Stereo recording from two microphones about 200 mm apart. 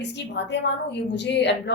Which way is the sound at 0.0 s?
60° left (ahead or behind).